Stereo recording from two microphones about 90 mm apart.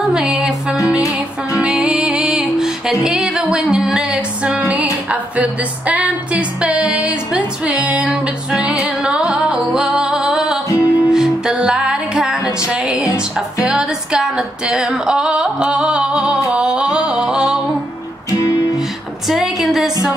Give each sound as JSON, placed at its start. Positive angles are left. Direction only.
{"t": 0.0, "sound": "music", "side_deg": -5}
{"t": 10.7, "sound": "music", "side_deg": 35}
{"t": 11.1, "sound": "music", "side_deg": -5}
{"t": 13.6, "sound": "female singing", "side_deg": -10}
{"t": 16.5, "sound": "a sound", "side_deg": -10}
{"t": 19.2, "sound": "music", "side_deg": -5}